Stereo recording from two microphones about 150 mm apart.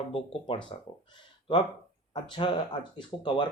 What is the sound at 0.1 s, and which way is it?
Speech, 35° left (ahead or behind).